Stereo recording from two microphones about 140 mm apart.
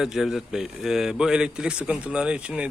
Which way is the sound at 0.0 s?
5° right (ahead or behind).